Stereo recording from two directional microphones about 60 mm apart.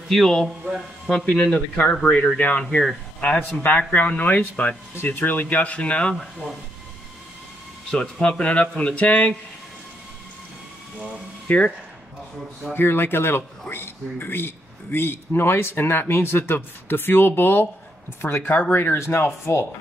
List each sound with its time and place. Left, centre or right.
0.1 s speech: centre; by 2.6 s left
2.7 s speech: centre
3.2 s a man's voice: left
7.9 s speech: centre
11.0 s speech: left
12.7 s a man's voice: left